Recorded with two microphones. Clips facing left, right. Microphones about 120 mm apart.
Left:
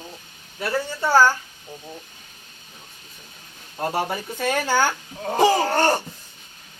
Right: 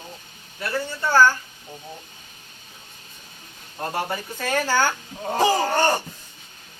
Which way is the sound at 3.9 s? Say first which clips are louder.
Even; 5° left (ahead or behind).